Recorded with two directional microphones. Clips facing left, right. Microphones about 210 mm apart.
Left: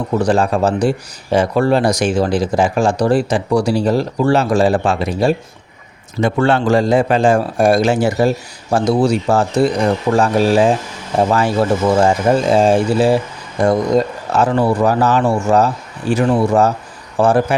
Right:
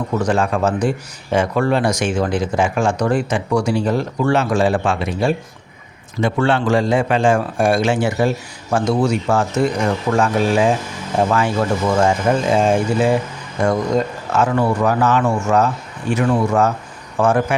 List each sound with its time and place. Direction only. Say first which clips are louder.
0.1 s speech: left 4 dB; 35° left (ahead or behind)